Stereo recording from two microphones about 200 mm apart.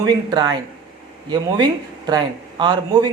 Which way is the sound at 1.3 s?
20° right (ahead or behind).